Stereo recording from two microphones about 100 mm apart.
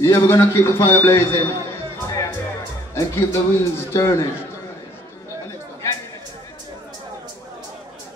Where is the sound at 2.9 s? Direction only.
25° left (ahead or behind).